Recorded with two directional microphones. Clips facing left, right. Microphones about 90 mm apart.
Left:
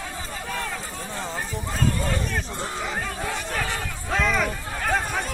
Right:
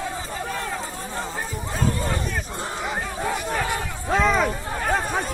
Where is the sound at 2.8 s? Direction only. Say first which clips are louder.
Right 4 dB; 15° right (ahead or behind).